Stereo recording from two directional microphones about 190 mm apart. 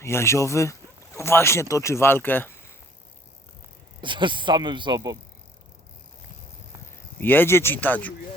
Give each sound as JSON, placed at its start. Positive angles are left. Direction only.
{"t": 0.0, "sound": "speech", "side_deg": 15}
{"t": 4.0, "sound": "speech", "side_deg": -25}
{"t": 7.2, "sound": "speech", "side_deg": 10}